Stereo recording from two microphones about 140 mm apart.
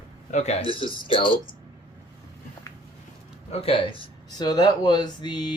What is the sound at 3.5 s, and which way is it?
Speech, 45° left (ahead or behind).